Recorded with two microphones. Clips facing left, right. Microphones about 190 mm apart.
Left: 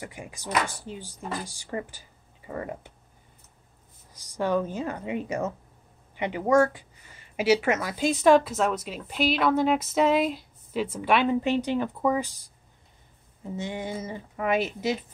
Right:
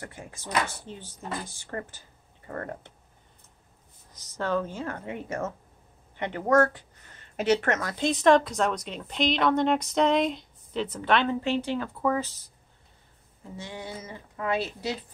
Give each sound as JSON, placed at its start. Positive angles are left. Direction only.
{"t": 0.0, "sound": "speech", "side_deg": 15}
{"t": 4.1, "sound": "speech", "side_deg": 10}